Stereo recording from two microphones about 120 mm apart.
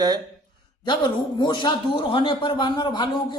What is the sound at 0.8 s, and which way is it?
A man's voice, 40° left (ahead or behind).